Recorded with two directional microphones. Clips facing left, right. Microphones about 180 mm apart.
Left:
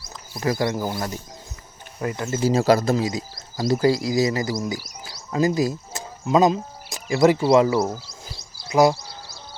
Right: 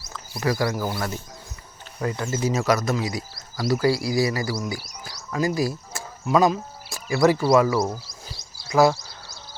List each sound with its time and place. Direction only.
0.1 s speech: 20° left (ahead or behind)